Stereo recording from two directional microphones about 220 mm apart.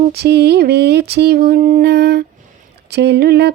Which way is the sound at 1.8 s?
50° right (ahead or behind).